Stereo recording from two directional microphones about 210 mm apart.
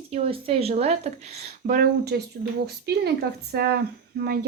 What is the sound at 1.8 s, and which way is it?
Speech, 50° right (ahead or behind).